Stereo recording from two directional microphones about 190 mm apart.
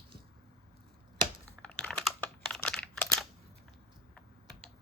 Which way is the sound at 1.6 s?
Centre (ahead or behind).